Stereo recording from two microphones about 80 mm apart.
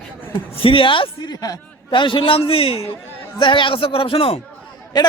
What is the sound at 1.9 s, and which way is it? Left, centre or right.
Speech, left.